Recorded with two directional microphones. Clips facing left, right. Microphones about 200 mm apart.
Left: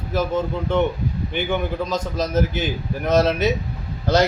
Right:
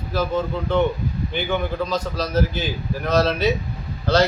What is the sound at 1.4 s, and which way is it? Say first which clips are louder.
A man's voice: even; 20° left (ahead or behind).